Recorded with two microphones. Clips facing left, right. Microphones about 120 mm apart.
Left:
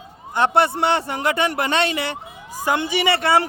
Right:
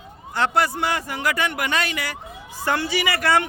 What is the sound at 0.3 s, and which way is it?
A man's voice, 25° left (ahead or behind).